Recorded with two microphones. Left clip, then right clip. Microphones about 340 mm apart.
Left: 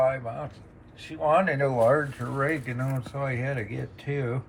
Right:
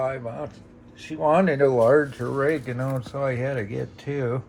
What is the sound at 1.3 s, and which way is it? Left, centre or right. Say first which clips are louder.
Speech: right 4 dB; centre.